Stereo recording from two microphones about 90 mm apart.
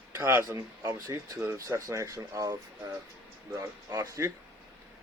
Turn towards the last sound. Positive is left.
turn(degrees=-35)  # may be behind; listen again after turning